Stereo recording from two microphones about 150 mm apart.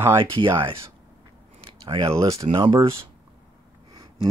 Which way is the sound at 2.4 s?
35° right (ahead or behind).